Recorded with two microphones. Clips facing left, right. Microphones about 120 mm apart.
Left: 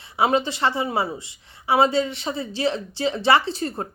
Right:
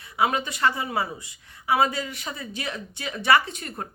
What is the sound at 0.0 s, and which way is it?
A woman's voice, 30° left (ahead or behind).